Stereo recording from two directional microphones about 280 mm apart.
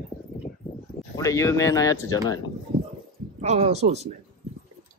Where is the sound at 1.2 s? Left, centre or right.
Centre.